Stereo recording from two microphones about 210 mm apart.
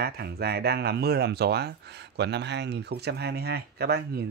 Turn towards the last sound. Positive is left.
turn(degrees=-50)  # may be behind; listen again after turning